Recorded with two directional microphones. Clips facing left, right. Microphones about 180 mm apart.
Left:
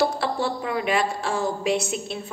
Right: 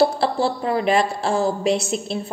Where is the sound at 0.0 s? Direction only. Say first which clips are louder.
Right 5 dB; 30° right (ahead or behind).